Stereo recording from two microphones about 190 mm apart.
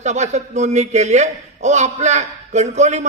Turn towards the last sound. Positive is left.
turn(degrees=-35)  # may be behind; listen again after turning